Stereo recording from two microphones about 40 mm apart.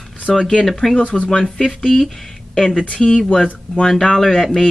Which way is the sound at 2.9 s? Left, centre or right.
Left.